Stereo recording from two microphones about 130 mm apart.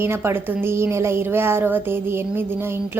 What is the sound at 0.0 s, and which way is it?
A woman's voice, 20° right (ahead or behind).